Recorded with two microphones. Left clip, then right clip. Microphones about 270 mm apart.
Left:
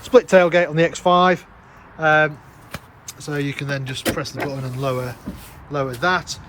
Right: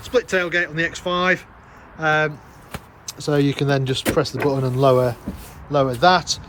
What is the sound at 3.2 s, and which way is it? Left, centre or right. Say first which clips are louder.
Speech: right 6 dB; centre.